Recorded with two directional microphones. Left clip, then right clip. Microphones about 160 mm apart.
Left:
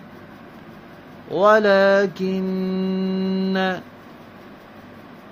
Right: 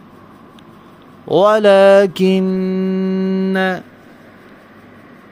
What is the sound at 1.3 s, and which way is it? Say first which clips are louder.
Mantra: right 5 dB; 75° right (ahead or behind).